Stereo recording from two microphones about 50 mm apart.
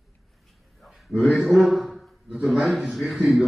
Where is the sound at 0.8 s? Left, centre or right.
Centre.